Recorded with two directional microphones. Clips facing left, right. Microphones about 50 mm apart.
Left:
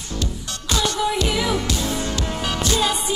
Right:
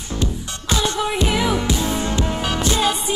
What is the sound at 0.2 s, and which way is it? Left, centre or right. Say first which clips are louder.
Music: right 3 dB; right.